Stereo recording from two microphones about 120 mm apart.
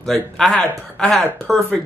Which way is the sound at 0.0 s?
5° left (ahead or behind).